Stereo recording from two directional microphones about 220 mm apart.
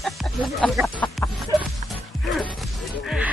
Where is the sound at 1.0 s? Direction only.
5° left (ahead or behind).